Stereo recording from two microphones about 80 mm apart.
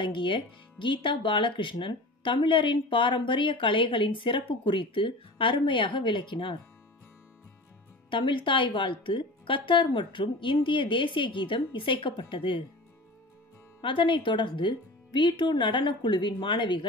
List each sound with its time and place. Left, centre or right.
0.0 s speech: left
8.1 s speech: left
13.7 s speech: left